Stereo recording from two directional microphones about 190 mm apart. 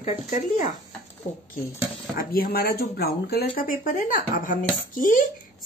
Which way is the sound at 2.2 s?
50° left (ahead or behind).